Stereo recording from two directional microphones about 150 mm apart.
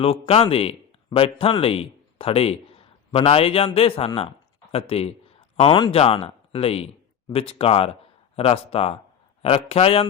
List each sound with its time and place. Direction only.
0.0 s speech: 40° left (ahead or behind)